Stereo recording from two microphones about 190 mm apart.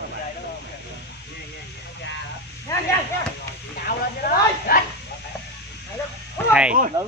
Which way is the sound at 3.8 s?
55° left (ahead or behind).